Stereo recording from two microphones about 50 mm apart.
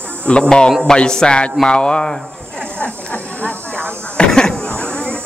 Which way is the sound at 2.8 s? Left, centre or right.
Left.